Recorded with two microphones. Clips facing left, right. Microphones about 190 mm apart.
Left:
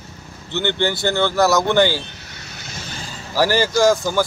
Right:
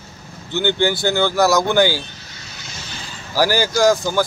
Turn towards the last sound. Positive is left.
turn(degrees=0)  # may be behind; listen again after turning